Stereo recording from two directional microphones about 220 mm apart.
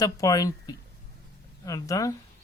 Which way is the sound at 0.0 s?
15° left (ahead or behind).